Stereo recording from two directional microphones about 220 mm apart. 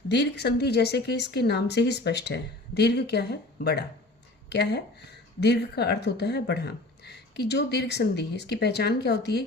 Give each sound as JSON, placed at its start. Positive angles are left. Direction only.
{"t": 0.1, "sound": "speech", "side_deg": 50}